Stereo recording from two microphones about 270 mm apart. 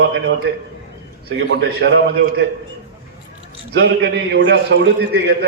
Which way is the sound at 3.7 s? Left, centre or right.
Right.